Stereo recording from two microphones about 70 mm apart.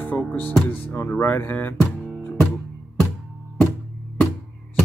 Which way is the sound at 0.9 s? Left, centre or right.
Left.